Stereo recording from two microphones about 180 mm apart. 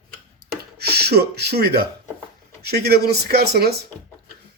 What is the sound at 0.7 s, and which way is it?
Speech, 60° right (ahead or behind).